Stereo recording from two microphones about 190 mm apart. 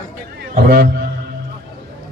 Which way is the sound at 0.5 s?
55° right (ahead or behind).